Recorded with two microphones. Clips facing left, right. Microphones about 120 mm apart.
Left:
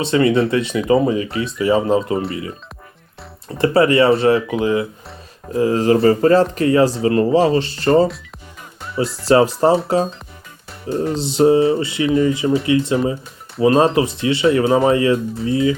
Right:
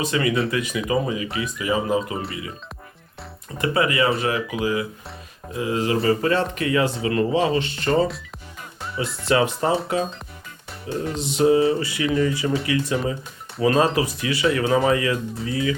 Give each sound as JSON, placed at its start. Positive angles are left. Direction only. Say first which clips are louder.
{"t": 0.0, "sound": "speech", "louder": "left 7 dB", "side_deg": 30}
{"t": 3.6, "sound": "speech", "louder": "left 7 dB", "side_deg": 35}
{"t": 5.5, "sound": "speech", "louder": "left 8 dB", "side_deg": 40}
{"t": 10.8, "sound": "speech", "louder": "left 6 dB", "side_deg": 35}